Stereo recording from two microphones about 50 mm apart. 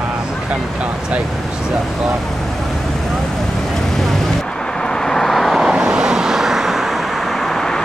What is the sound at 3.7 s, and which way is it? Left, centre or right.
Vehicle, centre.